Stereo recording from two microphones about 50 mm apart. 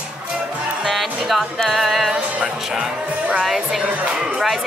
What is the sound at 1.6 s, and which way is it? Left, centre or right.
Speech, centre.